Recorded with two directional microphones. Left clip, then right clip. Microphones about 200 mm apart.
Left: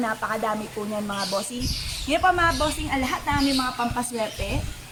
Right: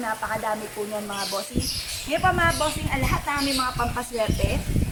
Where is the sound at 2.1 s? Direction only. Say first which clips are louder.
Left 1 dB; 20° left (ahead or behind).